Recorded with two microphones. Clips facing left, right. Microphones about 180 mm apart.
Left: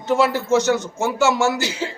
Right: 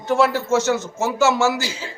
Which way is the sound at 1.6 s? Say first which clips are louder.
Left 4 dB; 70° left (ahead or behind).